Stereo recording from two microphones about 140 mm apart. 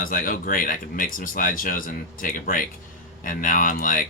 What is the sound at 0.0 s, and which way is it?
Speech, 80° left.